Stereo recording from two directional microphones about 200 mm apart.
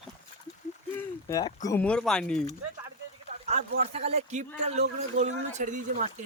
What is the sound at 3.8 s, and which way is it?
Speech, 35° right (ahead or behind).